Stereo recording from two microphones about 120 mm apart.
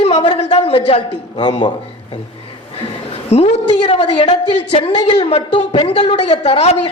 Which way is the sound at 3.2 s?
60° left (ahead or behind).